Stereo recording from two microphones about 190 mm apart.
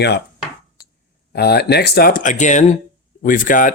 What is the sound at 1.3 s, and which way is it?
Speech, 55° left (ahead or behind).